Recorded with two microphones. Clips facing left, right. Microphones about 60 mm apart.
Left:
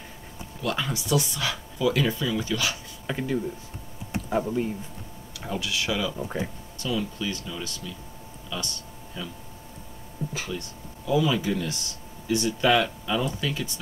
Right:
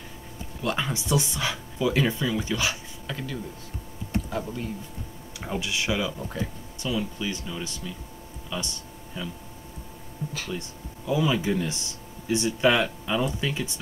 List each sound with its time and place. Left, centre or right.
0.6 s speech: right
3.1 s speech: left
4.1 s computer keyboard: left
5.4 s speech: right
6.1 s speech: centre
6.8 s speech: centre
8.5 s a sound: centre
10.5 s speech: right